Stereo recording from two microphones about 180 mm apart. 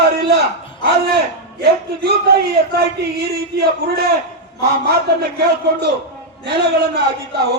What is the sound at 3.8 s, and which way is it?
Speech, 60° right (ahead or behind).